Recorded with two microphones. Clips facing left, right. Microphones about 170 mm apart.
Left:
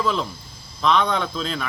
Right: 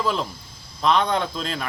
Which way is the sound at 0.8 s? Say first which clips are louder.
Even; 40° right (ahead or behind).